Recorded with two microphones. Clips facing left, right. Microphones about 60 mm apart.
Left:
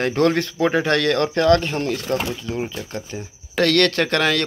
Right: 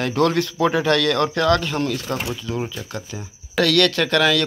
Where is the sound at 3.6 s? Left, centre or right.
Left.